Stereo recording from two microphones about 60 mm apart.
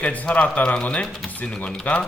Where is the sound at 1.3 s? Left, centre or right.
Left.